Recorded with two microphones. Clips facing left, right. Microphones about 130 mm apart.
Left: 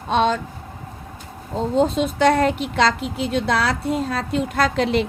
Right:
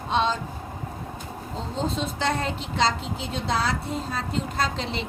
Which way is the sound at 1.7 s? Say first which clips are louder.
Left 9 dB; 60° left (ahead or behind).